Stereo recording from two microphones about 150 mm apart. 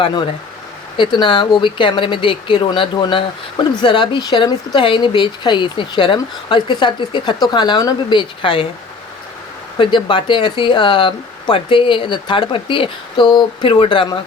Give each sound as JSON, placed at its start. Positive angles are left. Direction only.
{"t": 0.0, "sound": "speech", "side_deg": 30}
{"t": 9.7, "sound": "speech", "side_deg": 30}